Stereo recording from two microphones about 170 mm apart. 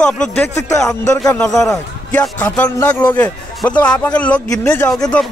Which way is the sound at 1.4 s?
5° left (ahead or behind).